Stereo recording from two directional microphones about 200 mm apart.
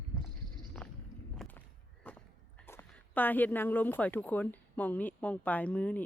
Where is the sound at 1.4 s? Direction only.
Centre (ahead or behind).